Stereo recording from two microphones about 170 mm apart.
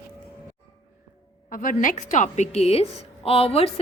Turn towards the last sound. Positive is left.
turn(degrees=35)  # may be behind; listen again after turning